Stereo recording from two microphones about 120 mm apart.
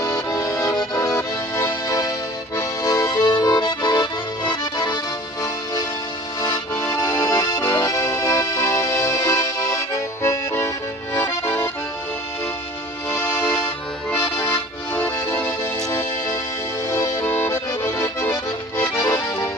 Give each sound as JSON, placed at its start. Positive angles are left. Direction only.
{"t": 0.0, "sound": "accordion", "side_deg": 30}
{"t": 0.6, "sound": "music", "side_deg": 30}
{"t": 2.6, "sound": "accordion", "side_deg": 25}
{"t": 3.2, "sound": "accordion", "side_deg": 35}
{"t": 6.8, "sound": "music", "side_deg": 25}
{"t": 7.6, "sound": "accordion", "side_deg": 15}
{"t": 7.9, "sound": "accordion", "side_deg": 25}
{"t": 13.1, "sound": "music", "side_deg": 20}
{"t": 16.9, "sound": "accordion", "side_deg": 20}